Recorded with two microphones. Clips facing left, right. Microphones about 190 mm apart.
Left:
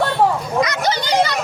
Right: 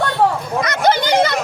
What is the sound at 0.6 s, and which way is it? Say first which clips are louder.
Children playing: right 5 dB; 55° right (ahead or behind).